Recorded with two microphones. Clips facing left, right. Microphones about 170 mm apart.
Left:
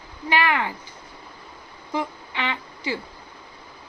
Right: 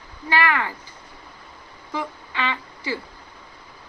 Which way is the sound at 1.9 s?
20° left (ahead or behind).